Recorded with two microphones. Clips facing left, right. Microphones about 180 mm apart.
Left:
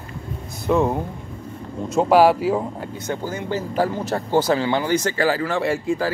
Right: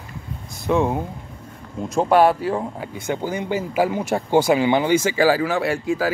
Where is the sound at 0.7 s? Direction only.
Centre (ahead or behind).